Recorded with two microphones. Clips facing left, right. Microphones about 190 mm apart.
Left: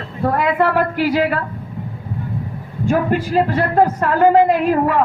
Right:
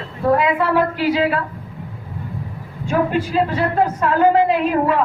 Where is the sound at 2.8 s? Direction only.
55° left (ahead or behind).